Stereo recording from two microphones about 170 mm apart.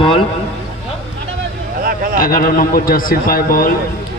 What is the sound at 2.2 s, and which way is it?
A man's voice, 55° left (ahead or behind).